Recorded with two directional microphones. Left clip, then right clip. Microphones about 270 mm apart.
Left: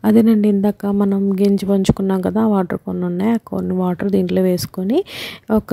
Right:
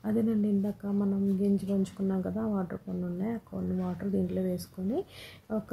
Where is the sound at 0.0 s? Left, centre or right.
Left.